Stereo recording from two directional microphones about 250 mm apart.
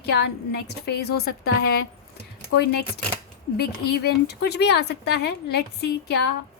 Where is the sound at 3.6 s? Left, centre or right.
Left.